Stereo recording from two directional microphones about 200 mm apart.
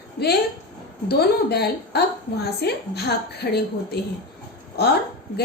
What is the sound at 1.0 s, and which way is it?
A woman's voice, 55° left (ahead or behind).